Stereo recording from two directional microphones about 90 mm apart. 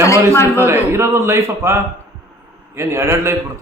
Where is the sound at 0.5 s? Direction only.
25° right (ahead or behind).